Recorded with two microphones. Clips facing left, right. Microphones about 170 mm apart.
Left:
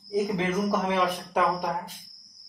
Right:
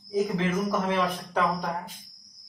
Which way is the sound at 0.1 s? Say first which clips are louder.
Even; 15° left (ahead or behind).